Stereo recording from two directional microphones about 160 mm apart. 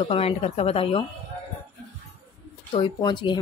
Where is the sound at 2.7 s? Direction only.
30° left (ahead or behind).